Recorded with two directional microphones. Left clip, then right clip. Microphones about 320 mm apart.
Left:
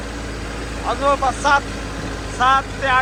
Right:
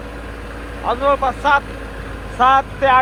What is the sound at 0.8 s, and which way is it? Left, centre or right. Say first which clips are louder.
Speech: right 2 dB; centre.